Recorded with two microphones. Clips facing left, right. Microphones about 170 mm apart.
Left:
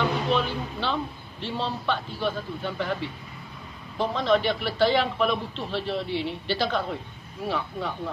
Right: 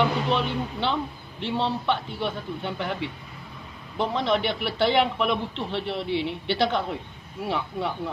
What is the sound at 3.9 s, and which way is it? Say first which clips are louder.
A man's voice: left 1 dB; 20° right (ahead or behind).